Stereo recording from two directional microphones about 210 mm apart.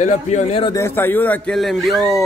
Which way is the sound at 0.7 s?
10° left (ahead or behind).